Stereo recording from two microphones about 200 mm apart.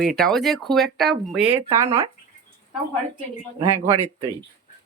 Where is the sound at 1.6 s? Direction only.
15° right (ahead or behind).